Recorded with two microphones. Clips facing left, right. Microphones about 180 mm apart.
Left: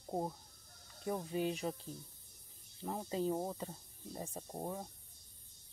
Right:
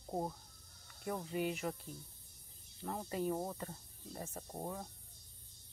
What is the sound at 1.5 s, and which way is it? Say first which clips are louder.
Speech: left 1 dB; 15° left (ahead or behind).